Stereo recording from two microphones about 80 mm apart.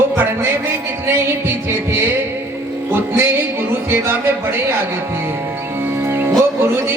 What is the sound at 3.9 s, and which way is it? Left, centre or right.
Music, right.